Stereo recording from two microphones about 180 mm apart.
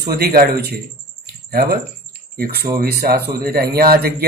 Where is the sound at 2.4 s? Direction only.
60° right (ahead or behind).